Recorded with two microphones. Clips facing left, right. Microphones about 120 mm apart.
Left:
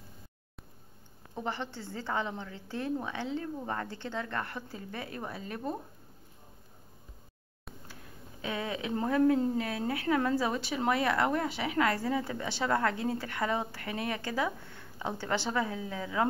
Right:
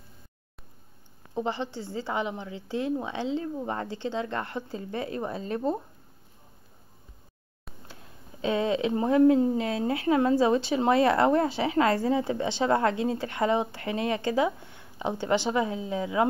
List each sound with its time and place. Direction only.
1.3 s a woman's voice: 20° right (ahead or behind)
7.9 s a sound: 25° right (ahead or behind)
8.9 s speech: 20° right (ahead or behind)